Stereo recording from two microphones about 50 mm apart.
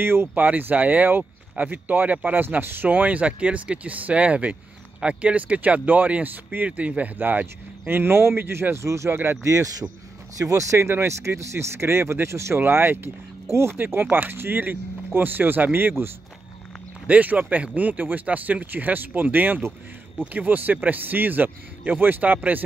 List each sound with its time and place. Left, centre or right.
0.0 s speech: right
0.4 s speech: right
8.7 s speech: right
9.1 s speech: right
9.4 s speech: right
12.5 s speech: right
13.5 s speech: right
13.7 s speech: right
17.1 s speech: right